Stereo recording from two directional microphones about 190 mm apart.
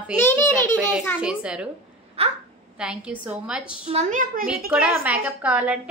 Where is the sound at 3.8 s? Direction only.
35° right (ahead or behind).